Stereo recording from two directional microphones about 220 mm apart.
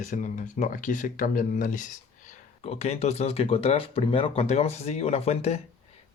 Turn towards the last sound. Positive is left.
turn(degrees=30)  # may be behind; listen again after turning